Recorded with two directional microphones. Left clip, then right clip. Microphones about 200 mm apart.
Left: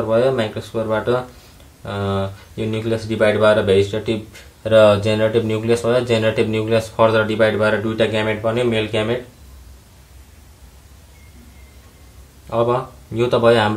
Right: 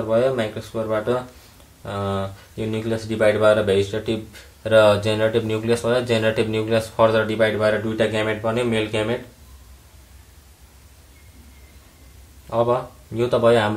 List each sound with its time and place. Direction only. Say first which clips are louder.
0.1 s speech: left 2 dB; 10° left (ahead or behind)
12.4 s speech: left 2 dB; 5° left (ahead or behind)